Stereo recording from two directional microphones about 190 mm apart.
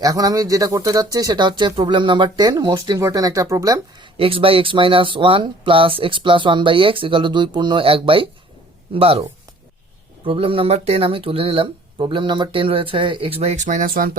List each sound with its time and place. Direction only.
0.0 s speech: 20° right (ahead or behind)
4.2 s speech: 30° right (ahead or behind)
10.2 s speech: 30° right (ahead or behind); by 14.2 s 50° right (ahead or behind)